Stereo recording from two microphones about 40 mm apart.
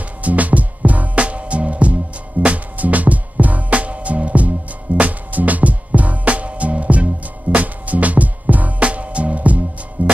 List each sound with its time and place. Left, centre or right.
0.2 s music: right